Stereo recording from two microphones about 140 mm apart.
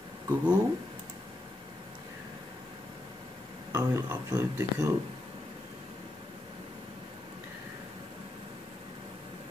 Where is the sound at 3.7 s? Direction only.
20° right (ahead or behind).